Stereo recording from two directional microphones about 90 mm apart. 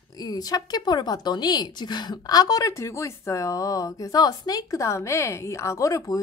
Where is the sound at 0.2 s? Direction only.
45° left (ahead or behind).